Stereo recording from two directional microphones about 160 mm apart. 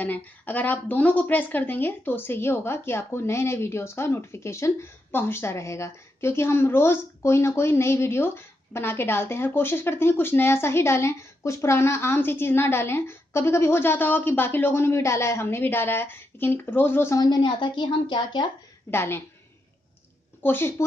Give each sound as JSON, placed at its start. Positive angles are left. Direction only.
{"t": 0.0, "sound": "a woman's voice", "side_deg": 10}
{"t": 18.9, "sound": "a woman's voice", "side_deg": 15}
{"t": 20.4, "sound": "a woman's voice", "side_deg": 15}